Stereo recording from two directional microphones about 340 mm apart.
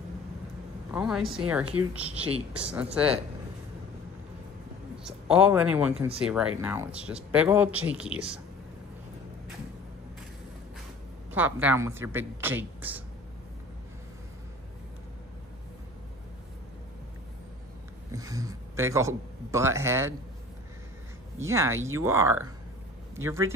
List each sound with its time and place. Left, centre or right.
0.9 s speech: centre
1.2 s a woman's voice: centre
2.0 s speech: centre
4.9 s a man's voice: centre
11.3 s a woman's voice: centre
18.1 s speech: centre
21.4 s a woman's voice: centre